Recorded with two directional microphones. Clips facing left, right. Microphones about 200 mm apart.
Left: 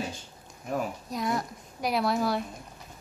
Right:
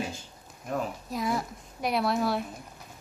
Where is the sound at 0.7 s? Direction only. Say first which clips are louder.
Left 1 dB; centre (ahead or behind).